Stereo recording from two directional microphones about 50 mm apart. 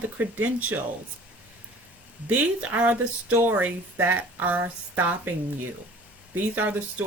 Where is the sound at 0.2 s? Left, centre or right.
Right.